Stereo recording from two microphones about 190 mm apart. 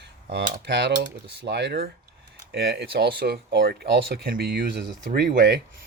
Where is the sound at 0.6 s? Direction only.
65° right (ahead or behind).